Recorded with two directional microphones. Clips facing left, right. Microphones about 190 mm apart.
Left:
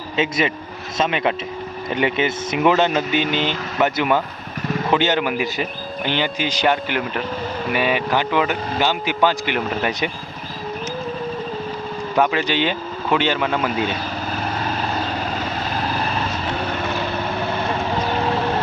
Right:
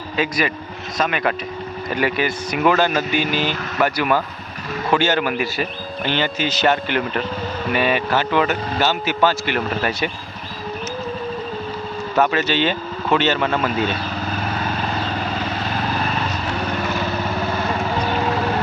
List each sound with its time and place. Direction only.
0.2 s speech: 25° left (ahead or behind)
12.1 s speech: 15° left (ahead or behind)